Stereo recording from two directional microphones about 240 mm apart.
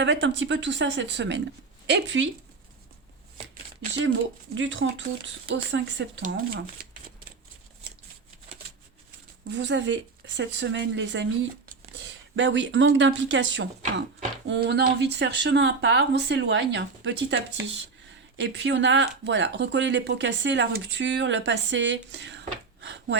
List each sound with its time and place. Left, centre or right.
0.0 s speech: right
4.5 s speech: right
9.5 s speech: right